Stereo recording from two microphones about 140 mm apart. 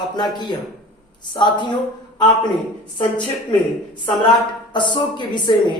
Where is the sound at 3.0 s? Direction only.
35° left (ahead or behind).